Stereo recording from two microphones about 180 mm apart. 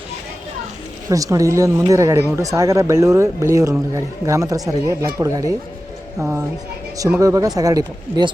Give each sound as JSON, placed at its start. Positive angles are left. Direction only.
{"t": 1.1, "sound": "speech", "side_deg": -20}